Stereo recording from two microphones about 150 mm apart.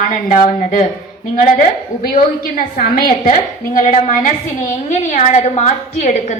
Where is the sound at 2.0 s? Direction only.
70° left (ahead or behind).